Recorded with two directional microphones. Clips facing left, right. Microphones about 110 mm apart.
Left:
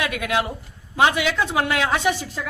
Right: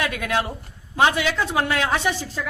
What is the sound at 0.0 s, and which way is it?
A woman's voice, 20° left (ahead or behind).